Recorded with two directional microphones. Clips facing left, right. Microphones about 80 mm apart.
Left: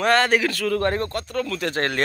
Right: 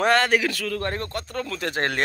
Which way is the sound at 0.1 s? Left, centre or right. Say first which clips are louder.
Left 5 dB; centre.